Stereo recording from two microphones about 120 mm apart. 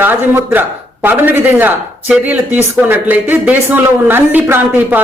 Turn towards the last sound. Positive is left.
turn(degrees=-15)  # may be behind; listen again after turning